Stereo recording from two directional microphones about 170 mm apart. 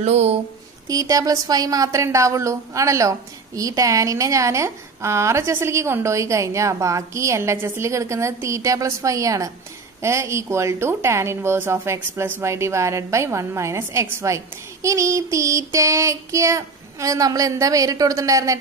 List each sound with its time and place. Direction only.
0.0 s speech: 40° right (ahead or behind)
0.8 s a woman's voice: 20° right (ahead or behind)